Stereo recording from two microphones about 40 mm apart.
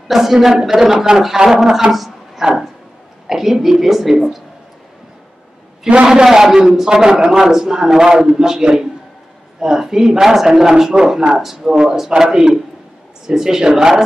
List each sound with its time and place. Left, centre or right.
0.1 s a man's voice: centre
6.0 s a man's voice: centre